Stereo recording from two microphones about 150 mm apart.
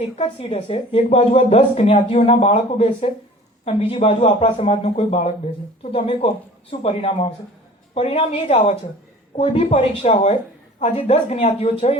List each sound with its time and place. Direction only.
0.4 s a man's voice: 40° left (ahead or behind)
10.8 s speech: 50° left (ahead or behind)